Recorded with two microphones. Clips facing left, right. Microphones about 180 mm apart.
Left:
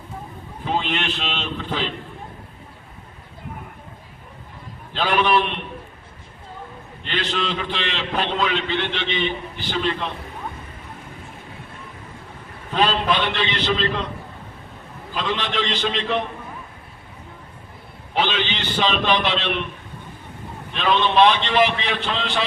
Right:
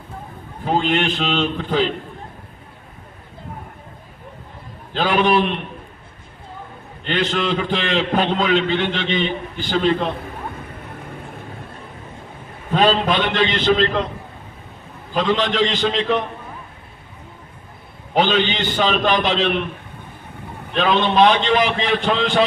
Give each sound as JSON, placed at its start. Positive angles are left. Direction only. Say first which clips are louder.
{"t": 0.6, "sound": "a man's voice", "louder": "right 5 dB", "side_deg": -45}
{"t": 4.9, "sound": "a man's voice", "louder": "right 3 dB", "side_deg": -45}
{"t": 7.1, "sound": "a man's voice", "louder": "right 5 dB", "side_deg": -45}
{"t": 12.7, "sound": "a man's voice", "louder": "right 4 dB", "side_deg": -45}
{"t": 15.1, "sound": "a man's voice", "louder": "right 6 dB", "side_deg": -45}
{"t": 18.1, "sound": "a man's voice", "louder": "right 5 dB", "side_deg": -45}
{"t": 20.7, "sound": "a man's voice", "louder": "right 2 dB", "side_deg": -45}